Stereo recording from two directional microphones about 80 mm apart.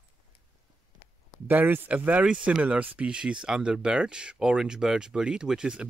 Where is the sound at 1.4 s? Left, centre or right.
Right.